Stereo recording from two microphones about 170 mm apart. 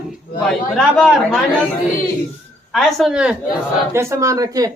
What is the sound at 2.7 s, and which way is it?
Speech, centre (ahead or behind).